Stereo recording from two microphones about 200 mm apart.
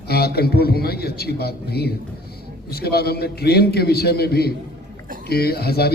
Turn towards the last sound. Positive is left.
turn(degrees=50)  # may be behind; listen again after turning